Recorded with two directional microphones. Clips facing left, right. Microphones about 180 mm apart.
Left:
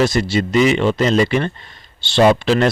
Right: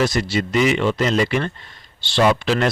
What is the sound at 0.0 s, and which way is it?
A man's voice, 25° left (ahead or behind).